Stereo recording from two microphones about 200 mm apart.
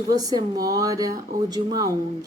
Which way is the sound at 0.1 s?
20° right (ahead or behind).